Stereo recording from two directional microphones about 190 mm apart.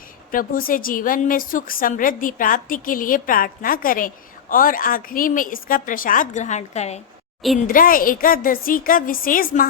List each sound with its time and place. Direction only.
0.3 s a woman's voice: 45° left (ahead or behind)
7.7 s a woman's voice: 45° left (ahead or behind)